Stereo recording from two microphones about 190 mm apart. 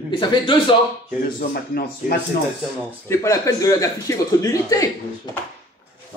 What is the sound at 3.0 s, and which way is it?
Speech, 15° left (ahead or behind).